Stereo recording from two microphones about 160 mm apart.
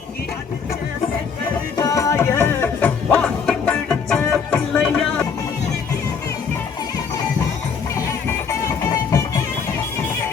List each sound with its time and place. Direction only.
1.7 s music: 20° left (ahead or behind)
8.4 s music: 20° left (ahead or behind)